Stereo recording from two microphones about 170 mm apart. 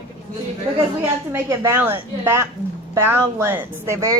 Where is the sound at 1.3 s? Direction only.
15° right (ahead or behind).